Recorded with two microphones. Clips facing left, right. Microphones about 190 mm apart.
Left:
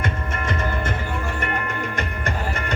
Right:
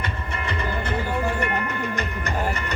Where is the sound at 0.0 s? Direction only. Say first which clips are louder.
Left 3 dB; 45° left (ahead or behind).